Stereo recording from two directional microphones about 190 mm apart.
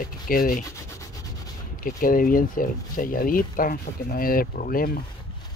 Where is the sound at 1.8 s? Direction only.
45° left (ahead or behind).